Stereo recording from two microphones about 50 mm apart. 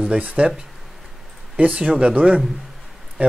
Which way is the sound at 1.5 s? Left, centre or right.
Right.